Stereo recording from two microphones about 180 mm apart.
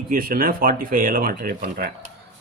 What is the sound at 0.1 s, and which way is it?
Speech, 55° right (ahead or behind).